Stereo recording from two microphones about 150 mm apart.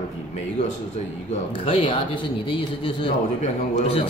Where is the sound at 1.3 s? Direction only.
40° left (ahead or behind).